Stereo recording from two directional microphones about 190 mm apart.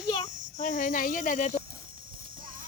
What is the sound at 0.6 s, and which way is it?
Speech, 45° left (ahead or behind).